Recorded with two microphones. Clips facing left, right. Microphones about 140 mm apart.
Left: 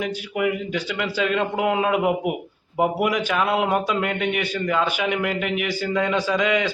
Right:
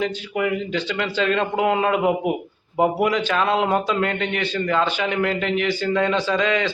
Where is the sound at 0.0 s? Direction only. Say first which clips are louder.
Right 1 dB; 10° left (ahead or behind).